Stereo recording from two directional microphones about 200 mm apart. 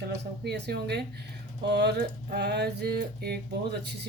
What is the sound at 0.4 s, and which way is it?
Speech, 55° right (ahead or behind).